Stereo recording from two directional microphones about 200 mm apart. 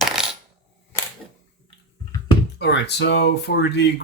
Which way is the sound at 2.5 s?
60° left (ahead or behind).